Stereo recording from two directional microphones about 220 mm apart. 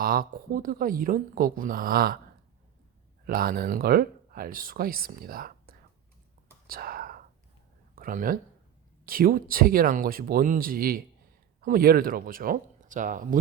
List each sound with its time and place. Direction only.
0.0 s speech: 40° right (ahead or behind)
3.2 s speech: 45° right (ahead or behind)
6.7 s whispering: 40° right (ahead or behind)
7.9 s speech: 40° right (ahead or behind)